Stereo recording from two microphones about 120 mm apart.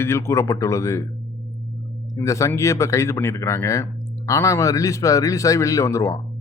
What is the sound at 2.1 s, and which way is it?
Speech, 25° left (ahead or behind).